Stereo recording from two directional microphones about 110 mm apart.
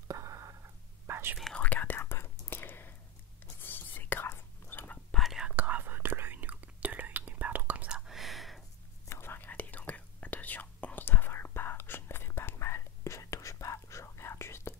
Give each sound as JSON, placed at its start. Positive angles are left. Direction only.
{"t": 0.1, "sound": "a sound", "side_deg": -30}
{"t": 1.0, "sound": "whispering", "side_deg": -20}
{"t": 1.4, "sound": "whispering", "side_deg": 10}
{"t": 5.1, "sound": "whispering", "side_deg": 0}
{"t": 5.6, "sound": "whispering", "side_deg": -15}
{"t": 8.1, "sound": "whispering", "side_deg": 0}
{"t": 9.1, "sound": "whispering", "side_deg": 20}